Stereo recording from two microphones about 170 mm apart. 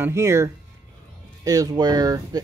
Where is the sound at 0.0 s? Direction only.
15° right (ahead or behind).